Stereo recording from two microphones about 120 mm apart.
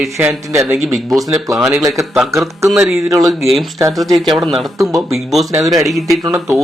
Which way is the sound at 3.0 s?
30° right (ahead or behind).